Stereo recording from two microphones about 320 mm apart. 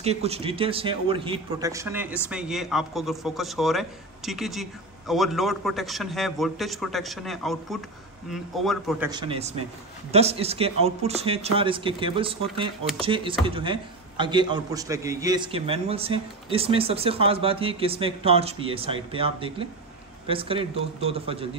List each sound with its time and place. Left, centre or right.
0.0 s a man's voice: centre
9.1 s a man's voice: centre